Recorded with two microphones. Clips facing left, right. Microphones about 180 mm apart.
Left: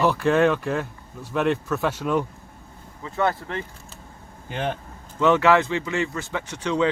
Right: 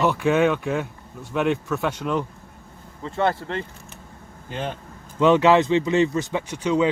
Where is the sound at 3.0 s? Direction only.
25° right (ahead or behind).